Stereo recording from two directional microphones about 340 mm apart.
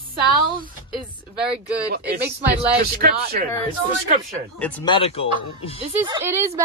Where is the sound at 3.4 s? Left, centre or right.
Right.